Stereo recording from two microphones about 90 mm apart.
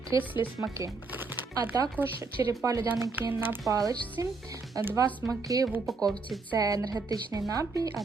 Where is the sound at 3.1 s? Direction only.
20° right (ahead or behind).